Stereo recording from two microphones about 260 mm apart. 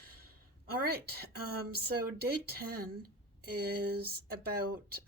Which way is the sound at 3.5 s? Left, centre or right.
Right.